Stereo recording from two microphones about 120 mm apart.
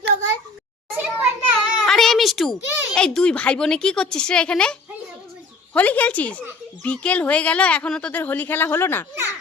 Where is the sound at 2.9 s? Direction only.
5° left (ahead or behind).